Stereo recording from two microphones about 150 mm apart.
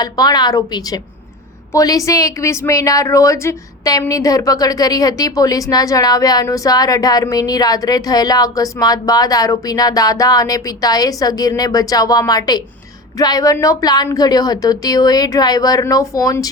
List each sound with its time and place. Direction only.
0.0 s speech: 25° left (ahead or behind)